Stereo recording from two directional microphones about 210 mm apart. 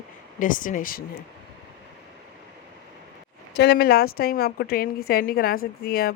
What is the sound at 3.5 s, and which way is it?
Speech, 50° left (ahead or behind).